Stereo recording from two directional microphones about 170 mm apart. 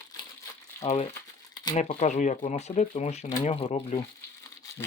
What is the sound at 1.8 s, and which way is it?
Speech, 45° left (ahead or behind).